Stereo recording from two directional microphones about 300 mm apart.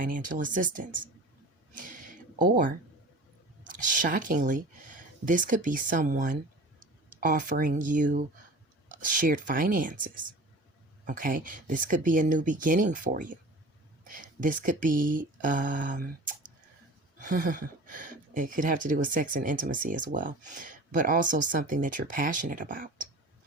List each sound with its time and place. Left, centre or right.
0.0 s speech: right
1.7 s a sound: right
3.9 s speech: right
17.2 s speech: right